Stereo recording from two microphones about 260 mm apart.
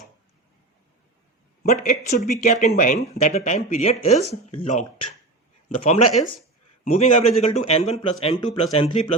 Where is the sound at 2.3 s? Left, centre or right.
Left.